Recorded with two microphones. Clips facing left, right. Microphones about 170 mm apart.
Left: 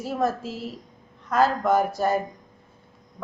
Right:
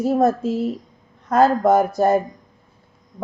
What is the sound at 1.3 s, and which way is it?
Speech, 45° right (ahead or behind).